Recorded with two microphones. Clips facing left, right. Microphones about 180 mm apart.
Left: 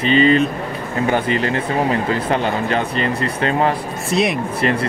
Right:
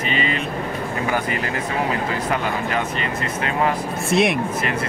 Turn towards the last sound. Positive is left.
turn(degrees=0)  # may be behind; listen again after turning